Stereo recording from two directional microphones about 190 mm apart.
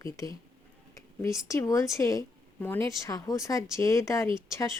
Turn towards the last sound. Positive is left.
turn(degrees=15)  # may be behind; listen again after turning